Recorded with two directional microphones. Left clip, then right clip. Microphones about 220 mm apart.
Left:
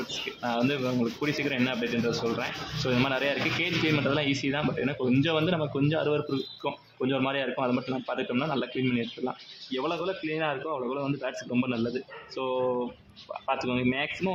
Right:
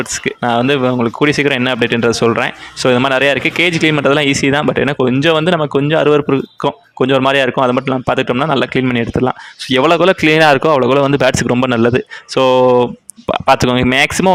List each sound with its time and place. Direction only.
0.4 s speech: 45° right (ahead or behind)